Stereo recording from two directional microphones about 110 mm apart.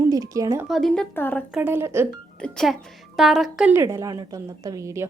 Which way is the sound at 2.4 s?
5° left (ahead or behind).